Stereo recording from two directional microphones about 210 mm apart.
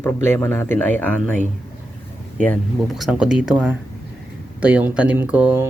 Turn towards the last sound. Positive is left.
turn(degrees=-5)  # may be behind; listen again after turning